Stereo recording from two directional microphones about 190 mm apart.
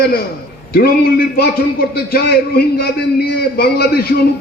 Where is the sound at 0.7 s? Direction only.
55° left (ahead or behind).